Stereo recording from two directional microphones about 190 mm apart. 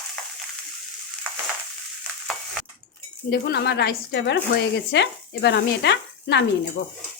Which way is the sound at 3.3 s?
60° left (ahead or behind).